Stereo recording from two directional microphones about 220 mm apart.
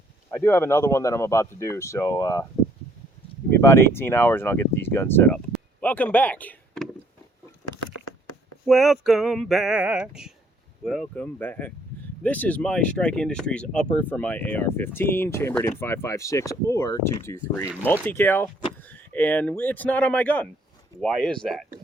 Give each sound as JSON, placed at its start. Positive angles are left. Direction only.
{"t": 0.3, "sound": "speech", "side_deg": 10}
{"t": 3.6, "sound": "speech", "side_deg": 10}
{"t": 7.8, "sound": "a sound", "side_deg": 90}
{"t": 8.6, "sound": "male singing", "side_deg": 0}
{"t": 10.8, "sound": "speech", "side_deg": 0}
{"t": 21.0, "sound": "male singing", "side_deg": 0}